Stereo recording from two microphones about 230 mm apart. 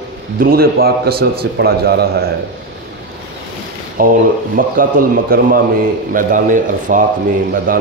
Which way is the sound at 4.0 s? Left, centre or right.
Right.